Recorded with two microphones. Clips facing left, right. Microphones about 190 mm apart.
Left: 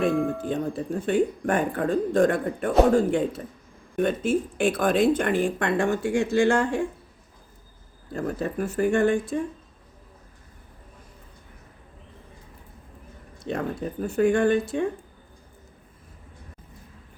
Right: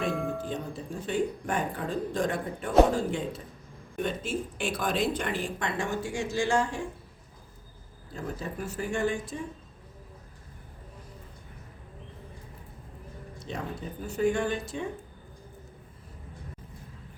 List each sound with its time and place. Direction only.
0.1 s speech: centre (ahead or behind)
0.5 s speech: 55° left (ahead or behind)
8.1 s speech: 55° left (ahead or behind)
13.5 s speech: 60° left (ahead or behind)